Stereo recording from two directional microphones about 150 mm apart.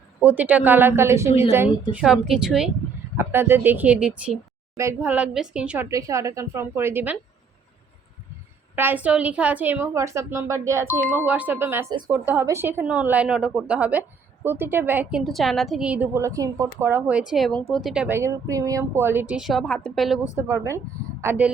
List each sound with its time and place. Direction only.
0.2 s a woman's voice: 10° right (ahead or behind)
1.9 s speech: 5° right (ahead or behind)
3.2 s a woman's voice: 15° right (ahead or behind)
5.9 s a woman's voice: 20° right (ahead or behind)
8.7 s a woman's voice: 15° right (ahead or behind)
11.9 s speech: 25° right (ahead or behind)
12.1 s a woman's voice: 10° right (ahead or behind)
15.2 s a woman's voice: centre (ahead or behind)
20.5 s a woman's voice: 20° right (ahead or behind)